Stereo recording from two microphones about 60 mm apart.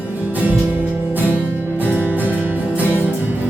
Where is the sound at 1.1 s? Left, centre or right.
Right.